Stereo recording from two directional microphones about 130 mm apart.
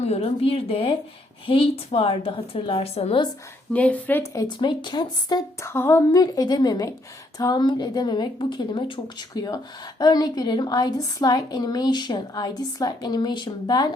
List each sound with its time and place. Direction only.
0.0 s a woman's voice: 55° left (ahead or behind)
3.7 s a woman's voice: 10° left (ahead or behind)
4.4 s speech: 35° left (ahead or behind)
5.5 s a woman's voice: 20° left (ahead or behind)